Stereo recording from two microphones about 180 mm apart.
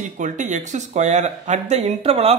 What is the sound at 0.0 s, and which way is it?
Speech, 45° right (ahead or behind).